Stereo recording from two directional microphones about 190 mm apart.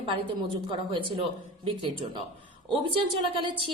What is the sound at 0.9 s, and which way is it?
Speech, 25° right (ahead or behind).